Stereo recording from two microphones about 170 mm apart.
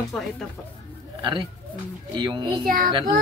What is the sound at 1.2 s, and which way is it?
Speech, 30° right (ahead or behind).